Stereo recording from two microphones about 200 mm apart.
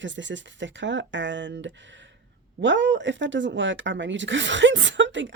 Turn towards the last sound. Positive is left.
turn(degrees=-65)  # may be behind; listen again after turning